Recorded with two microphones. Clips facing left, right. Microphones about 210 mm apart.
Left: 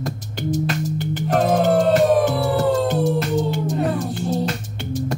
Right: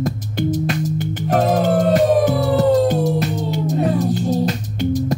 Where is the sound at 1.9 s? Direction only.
45° left (ahead or behind).